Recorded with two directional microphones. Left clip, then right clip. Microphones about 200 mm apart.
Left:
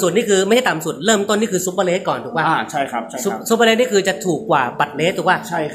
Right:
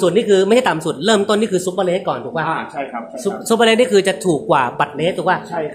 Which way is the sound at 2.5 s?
55° left (ahead or behind).